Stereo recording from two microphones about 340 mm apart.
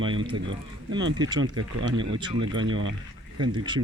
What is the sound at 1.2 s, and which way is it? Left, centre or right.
Speech, centre.